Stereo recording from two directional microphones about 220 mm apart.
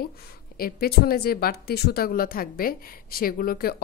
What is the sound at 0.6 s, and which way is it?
Speech, 45° left (ahead or behind).